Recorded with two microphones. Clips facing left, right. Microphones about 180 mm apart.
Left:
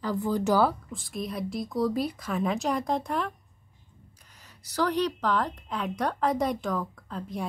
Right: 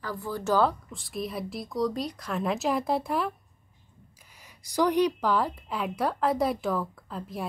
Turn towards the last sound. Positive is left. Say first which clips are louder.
# left 1 dB
turn(degrees=0)  # may be behind; listen again after turning